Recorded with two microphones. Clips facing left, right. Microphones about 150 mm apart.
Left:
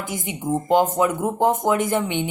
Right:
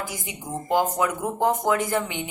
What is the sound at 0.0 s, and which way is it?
A woman's voice, 20° left (ahead or behind).